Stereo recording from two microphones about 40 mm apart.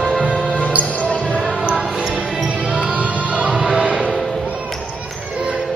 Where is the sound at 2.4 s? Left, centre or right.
Right.